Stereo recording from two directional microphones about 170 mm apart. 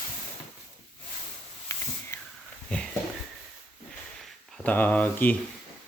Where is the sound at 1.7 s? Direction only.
20° left (ahead or behind).